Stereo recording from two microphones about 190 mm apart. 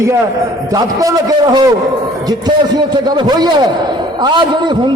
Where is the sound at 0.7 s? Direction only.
20° right (ahead or behind).